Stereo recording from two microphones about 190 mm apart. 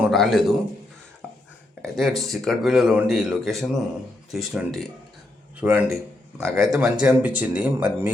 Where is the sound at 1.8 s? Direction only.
Centre (ahead or behind).